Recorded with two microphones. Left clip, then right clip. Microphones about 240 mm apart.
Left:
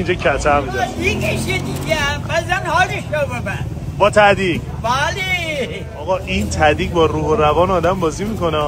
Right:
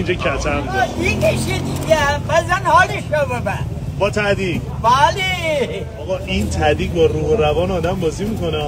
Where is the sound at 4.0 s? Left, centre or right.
Left.